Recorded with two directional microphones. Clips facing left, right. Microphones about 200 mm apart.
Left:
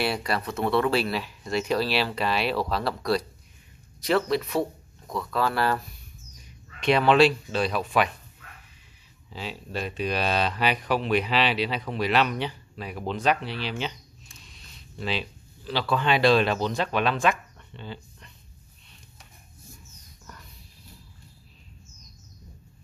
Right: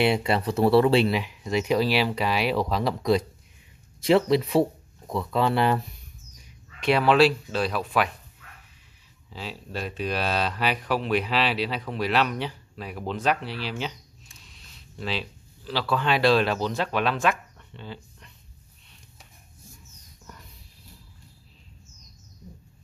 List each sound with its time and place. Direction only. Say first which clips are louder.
0.0 s speech: right 5 dB; 25° right (ahead or behind)
6.8 s speech: even; 5° right (ahead or behind)
9.3 s speech: left 1 dB; centre (ahead or behind)
15.0 s speech: left 1 dB; centre (ahead or behind)